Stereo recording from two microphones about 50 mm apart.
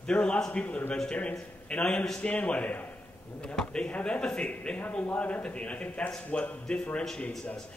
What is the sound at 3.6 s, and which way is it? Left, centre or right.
Speech, centre.